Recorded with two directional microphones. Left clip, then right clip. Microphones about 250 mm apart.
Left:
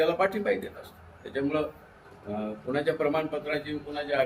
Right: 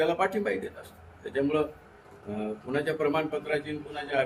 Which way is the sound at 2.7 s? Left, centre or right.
Centre.